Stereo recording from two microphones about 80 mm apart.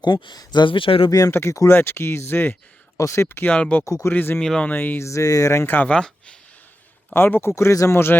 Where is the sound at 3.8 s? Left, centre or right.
Left.